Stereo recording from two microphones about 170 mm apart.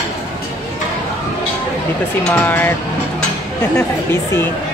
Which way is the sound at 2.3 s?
10° left (ahead or behind).